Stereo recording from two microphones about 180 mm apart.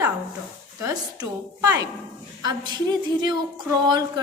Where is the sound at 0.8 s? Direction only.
20° right (ahead or behind).